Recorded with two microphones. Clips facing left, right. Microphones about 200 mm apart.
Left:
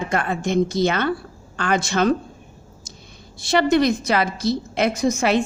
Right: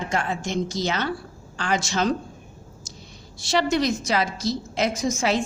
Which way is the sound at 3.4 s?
55° left (ahead or behind).